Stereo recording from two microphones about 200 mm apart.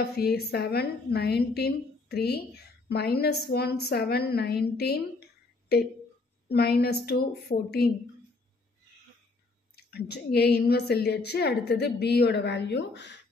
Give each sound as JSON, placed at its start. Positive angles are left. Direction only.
{"t": 0.1, "sound": "a woman's voice", "side_deg": 50}
{"t": 6.5, "sound": "a woman's voice", "side_deg": 55}
{"t": 9.8, "sound": "a woman's voice", "side_deg": 55}